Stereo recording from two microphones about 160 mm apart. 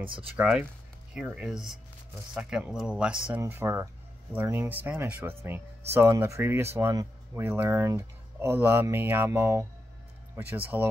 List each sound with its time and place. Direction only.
0.0 s speech: 35° right (ahead or behind)
0.4 s speech: 5° right (ahead or behind)